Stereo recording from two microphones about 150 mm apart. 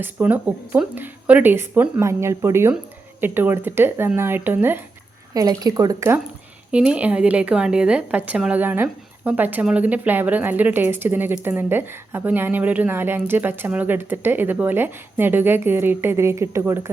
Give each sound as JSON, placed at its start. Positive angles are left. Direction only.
{"t": 0.0, "sound": "a woman's voice", "side_deg": -10}
{"t": 5.3, "sound": "speech", "side_deg": -25}
{"t": 6.7, "sound": "a woman's voice", "side_deg": -5}